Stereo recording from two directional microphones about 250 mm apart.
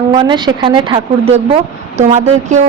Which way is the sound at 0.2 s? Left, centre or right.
Centre.